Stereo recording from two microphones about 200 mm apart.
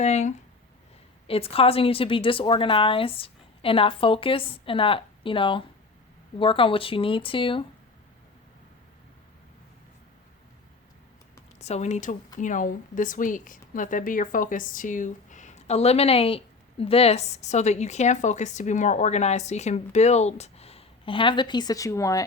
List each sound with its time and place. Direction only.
0.0 s a woman's voice: 35° left (ahead or behind)
11.6 s speech: 35° left (ahead or behind); by 22.2 s 15° left (ahead or behind)